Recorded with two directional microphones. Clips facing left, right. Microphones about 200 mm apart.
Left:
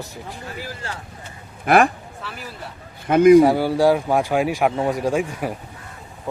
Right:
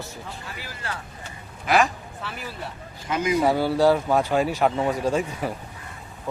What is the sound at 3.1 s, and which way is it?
Speech, 60° left (ahead or behind).